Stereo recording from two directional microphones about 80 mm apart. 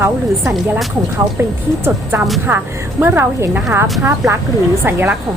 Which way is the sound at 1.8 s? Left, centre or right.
Right.